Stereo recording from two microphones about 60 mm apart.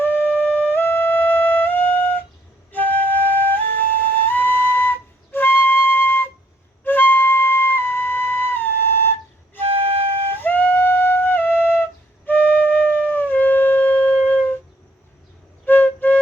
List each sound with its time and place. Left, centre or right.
0.0 s music: left
2.7 s flute: left
10.2 s flute: left
15.6 s flute: left